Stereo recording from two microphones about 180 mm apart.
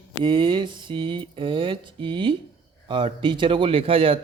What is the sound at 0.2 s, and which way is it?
Speech, 25° right (ahead or behind).